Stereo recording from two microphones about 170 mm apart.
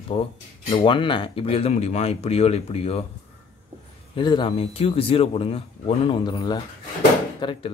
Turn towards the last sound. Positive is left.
turn(degrees=30)  # may be behind; listen again after turning